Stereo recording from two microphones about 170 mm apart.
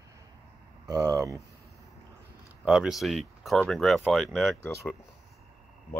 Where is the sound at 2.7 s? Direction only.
5° right (ahead or behind).